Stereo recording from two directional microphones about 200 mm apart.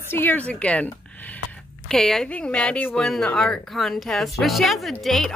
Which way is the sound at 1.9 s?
Centre (ahead or behind).